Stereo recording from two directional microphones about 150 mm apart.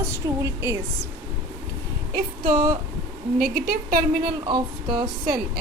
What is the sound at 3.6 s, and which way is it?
Speech, 85° right.